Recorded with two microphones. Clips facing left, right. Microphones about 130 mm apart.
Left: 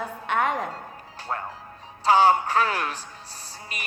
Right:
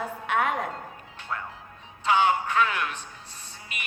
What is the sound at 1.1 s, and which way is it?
A man's voice, 35° left (ahead or behind).